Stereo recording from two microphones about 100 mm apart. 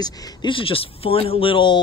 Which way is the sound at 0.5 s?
65° left (ahead or behind).